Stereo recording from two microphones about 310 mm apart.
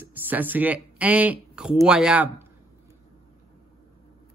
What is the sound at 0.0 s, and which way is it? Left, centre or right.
Speech, centre.